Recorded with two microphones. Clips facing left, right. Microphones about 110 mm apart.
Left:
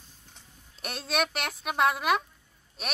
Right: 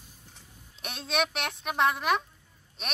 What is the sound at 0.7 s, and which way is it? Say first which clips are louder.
A woman's voice: even; centre (ahead or behind).